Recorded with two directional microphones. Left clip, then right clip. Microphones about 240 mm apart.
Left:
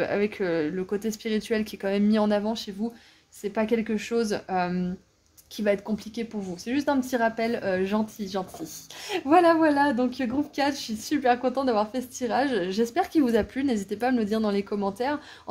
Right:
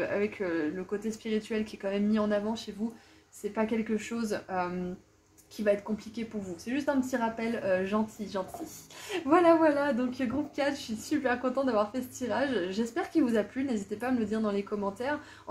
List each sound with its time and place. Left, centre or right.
0.0 s speech: left